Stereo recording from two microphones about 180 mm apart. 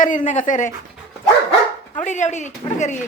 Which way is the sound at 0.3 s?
45° left (ahead or behind).